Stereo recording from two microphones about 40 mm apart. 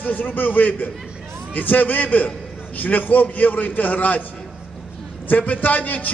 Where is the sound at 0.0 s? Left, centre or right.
Left.